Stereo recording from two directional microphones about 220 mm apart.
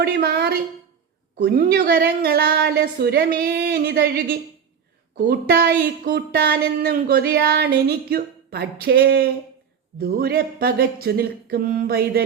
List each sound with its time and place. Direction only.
0.0 s speech: 45° right (ahead or behind)